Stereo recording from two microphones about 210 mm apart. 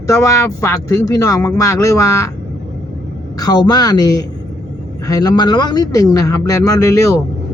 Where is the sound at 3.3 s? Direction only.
20° left (ahead or behind).